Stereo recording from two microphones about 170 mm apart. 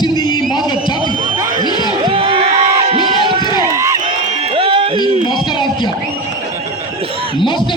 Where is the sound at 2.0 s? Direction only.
35° right (ahead or behind).